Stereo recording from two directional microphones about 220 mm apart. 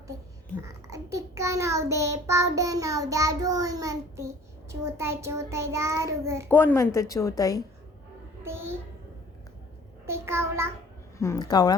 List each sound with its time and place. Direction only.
0.6 s child singing: 15° right (ahead or behind)
6.5 s a woman's voice: 10° left (ahead or behind)
10.1 s child singing: 10° right (ahead or behind)
11.2 s a woman's voice: 15° left (ahead or behind)